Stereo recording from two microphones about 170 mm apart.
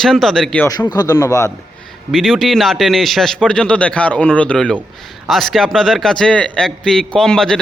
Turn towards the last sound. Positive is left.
turn(degrees=5)  # may be behind; listen again after turning